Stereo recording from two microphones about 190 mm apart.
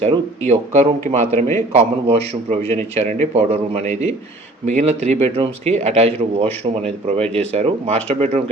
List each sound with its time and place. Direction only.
0.0 s speech: 35° right (ahead or behind)